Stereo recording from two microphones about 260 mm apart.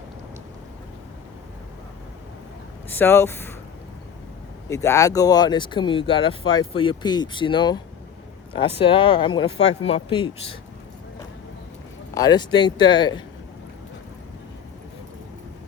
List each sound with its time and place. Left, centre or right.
2.9 s speech: centre
4.7 s speech: centre
12.1 s speech: centre